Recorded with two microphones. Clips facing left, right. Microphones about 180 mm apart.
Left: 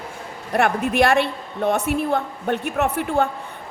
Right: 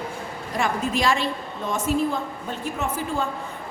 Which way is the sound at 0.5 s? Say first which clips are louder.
Left 6 dB; 65° left (ahead or behind).